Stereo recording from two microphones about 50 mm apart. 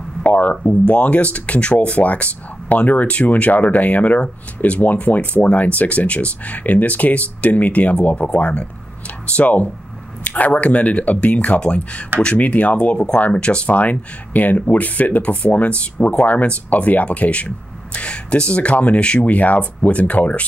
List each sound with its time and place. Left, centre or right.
0.2 s speech: left